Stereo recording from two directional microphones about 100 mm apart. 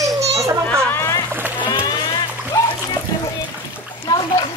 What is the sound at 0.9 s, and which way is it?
Boat, 25° left (ahead or behind).